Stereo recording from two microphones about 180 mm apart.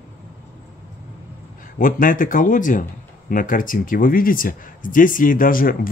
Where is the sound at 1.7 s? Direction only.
50° left (ahead or behind).